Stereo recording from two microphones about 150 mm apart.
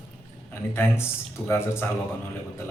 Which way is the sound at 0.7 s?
15° left (ahead or behind).